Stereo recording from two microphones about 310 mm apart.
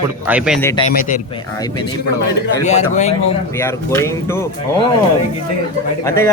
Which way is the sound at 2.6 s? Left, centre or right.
Left.